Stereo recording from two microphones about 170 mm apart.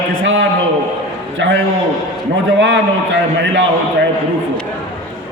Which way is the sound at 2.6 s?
90° right.